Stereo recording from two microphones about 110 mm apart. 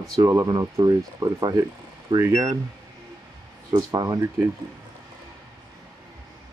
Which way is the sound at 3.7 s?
40° right (ahead or behind).